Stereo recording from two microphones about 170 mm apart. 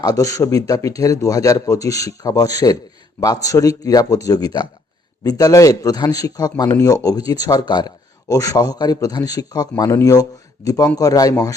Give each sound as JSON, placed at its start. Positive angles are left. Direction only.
{"t": 0.0, "sound": "a man's voice", "side_deg": 20}